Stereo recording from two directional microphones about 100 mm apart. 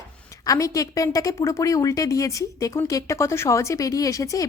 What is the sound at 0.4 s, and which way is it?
A woman's voice, 35° left (ahead or behind).